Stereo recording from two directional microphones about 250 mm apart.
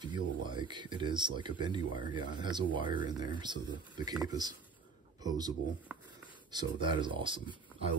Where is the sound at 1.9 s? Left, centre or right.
Left.